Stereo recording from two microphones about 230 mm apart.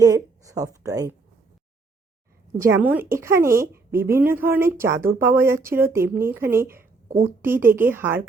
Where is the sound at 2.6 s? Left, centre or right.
Centre.